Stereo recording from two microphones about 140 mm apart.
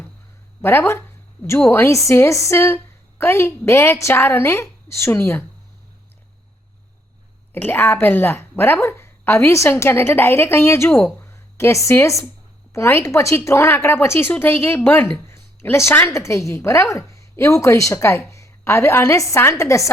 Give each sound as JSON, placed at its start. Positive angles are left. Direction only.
{"t": 0.6, "sound": "a woman's voice", "side_deg": 15}
{"t": 7.5, "sound": "a woman's voice", "side_deg": 15}